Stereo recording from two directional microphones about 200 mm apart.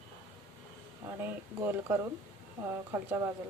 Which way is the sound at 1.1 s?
10° right (ahead or behind).